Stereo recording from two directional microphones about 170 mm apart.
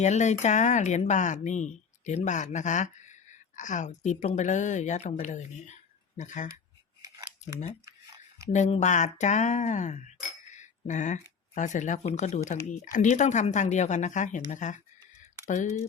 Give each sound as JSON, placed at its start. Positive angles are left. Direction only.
{"t": 0.0, "sound": "speech", "side_deg": 45}
{"t": 8.5, "sound": "speech", "side_deg": 45}